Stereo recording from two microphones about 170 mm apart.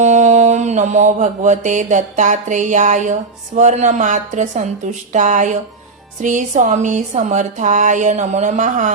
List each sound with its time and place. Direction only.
0.0 s mantra: 45° right (ahead or behind)
3.6 s speech: 45° right (ahead or behind)